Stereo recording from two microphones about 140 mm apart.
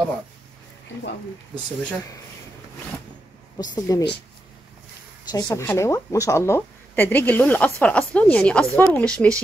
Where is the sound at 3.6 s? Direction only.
30° left (ahead or behind).